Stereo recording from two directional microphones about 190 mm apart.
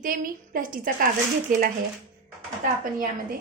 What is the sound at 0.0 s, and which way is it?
Speech, 45° right (ahead or behind).